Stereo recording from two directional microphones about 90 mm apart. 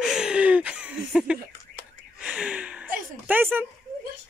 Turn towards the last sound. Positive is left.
turn(degrees=-20)  # may be behind; listen again after turning